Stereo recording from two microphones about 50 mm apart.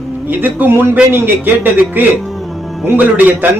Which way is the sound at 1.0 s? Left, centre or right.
Right.